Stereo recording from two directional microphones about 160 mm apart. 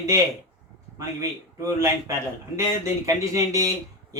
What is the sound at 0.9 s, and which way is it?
Speech, 20° right (ahead or behind).